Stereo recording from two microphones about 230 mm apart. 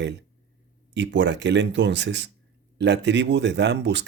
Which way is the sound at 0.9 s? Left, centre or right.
Right.